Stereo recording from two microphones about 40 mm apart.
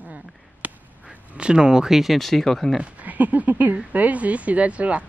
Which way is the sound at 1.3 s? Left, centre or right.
Right.